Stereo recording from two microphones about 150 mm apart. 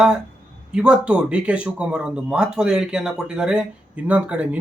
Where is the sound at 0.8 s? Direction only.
5° right (ahead or behind).